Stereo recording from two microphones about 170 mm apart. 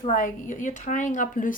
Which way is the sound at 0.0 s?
50° left (ahead or behind).